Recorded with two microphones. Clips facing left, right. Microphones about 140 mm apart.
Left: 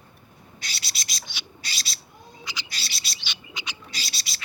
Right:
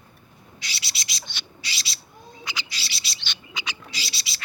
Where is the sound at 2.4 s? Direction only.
65° right (ahead or behind).